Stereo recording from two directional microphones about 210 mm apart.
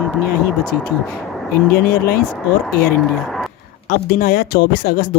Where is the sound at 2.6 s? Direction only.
Centre (ahead or behind).